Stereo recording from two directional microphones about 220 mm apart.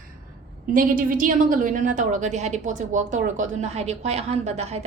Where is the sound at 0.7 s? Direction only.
40° right (ahead or behind).